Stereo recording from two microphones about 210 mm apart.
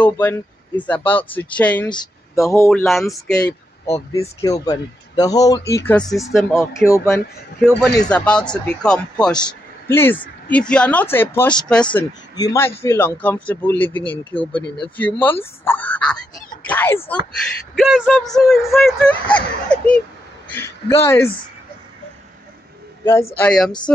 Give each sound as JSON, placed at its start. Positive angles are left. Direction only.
{"t": 0.0, "sound": "speech", "side_deg": 10}
{"t": 1.9, "sound": "speech", "side_deg": 15}
{"t": 2.9, "sound": "speech", "side_deg": 0}
{"t": 4.1, "sound": "speech", "side_deg": 15}
{"t": 6.5, "sound": "a man's voice", "side_deg": 15}
{"t": 17.7, "sound": "speech", "side_deg": 0}
{"t": 23.3, "sound": "speech", "side_deg": 5}